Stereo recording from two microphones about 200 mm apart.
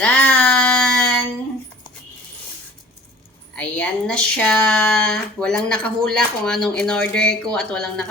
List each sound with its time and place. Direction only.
0.0 s music: 5° left (ahead or behind)
3.5 s speech: 5° left (ahead or behind)